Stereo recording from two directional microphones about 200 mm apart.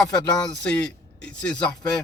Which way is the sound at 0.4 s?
5° left (ahead or behind).